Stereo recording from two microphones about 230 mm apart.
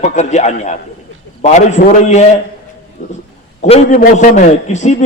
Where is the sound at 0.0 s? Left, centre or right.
Left.